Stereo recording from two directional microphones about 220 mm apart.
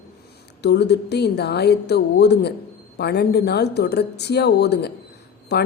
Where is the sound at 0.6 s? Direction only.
50° left (ahead or behind).